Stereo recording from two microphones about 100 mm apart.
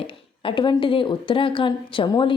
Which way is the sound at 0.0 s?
60° left (ahead or behind).